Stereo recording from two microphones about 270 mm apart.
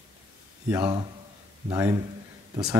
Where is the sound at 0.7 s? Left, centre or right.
Centre.